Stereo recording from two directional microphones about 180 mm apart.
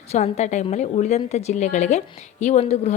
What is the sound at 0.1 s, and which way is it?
A woman's voice, 40° left (ahead or behind).